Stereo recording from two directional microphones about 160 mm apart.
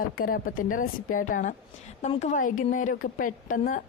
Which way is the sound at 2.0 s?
45° left (ahead or behind).